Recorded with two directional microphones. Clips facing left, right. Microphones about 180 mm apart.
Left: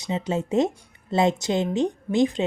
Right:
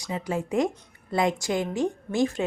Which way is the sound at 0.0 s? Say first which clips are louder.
Left 3 dB; 25° left (ahead or behind).